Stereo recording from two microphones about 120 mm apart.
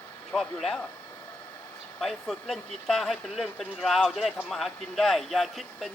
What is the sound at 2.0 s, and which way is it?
Speech, centre (ahead or behind).